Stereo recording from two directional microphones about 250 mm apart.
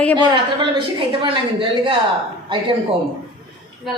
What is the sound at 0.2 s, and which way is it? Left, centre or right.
A woman's voice, centre.